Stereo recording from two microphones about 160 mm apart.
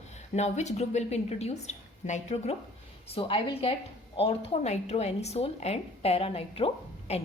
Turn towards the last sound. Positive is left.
turn(degrees=40)  # may be behind; listen again after turning